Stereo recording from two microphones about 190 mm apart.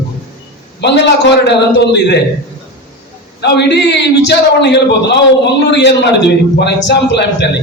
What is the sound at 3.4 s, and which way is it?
A man's voice, 65° left (ahead or behind).